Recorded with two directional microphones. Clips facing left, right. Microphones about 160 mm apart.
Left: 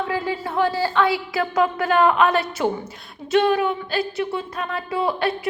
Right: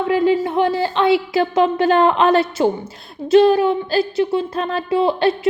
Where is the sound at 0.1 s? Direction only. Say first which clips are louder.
Right 9 dB; 20° right (ahead or behind).